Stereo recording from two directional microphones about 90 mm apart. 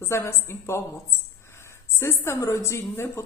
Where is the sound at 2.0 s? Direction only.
30° left (ahead or behind).